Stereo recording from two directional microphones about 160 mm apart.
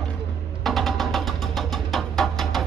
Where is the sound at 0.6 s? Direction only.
Centre (ahead or behind).